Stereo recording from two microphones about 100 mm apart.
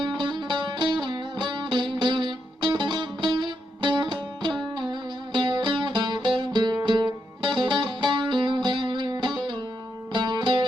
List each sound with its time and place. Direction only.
0.0 s music: 50° right (ahead or behind)